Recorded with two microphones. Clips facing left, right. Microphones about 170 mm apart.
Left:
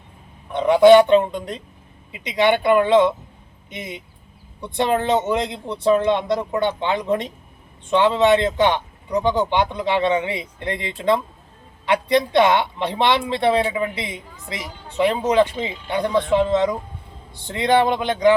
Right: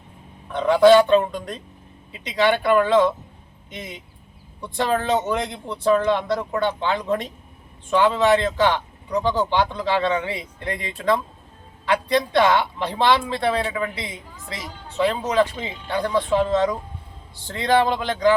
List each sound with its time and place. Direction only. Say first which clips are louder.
0.5 s speech: left 2 dB; 20° left (ahead or behind)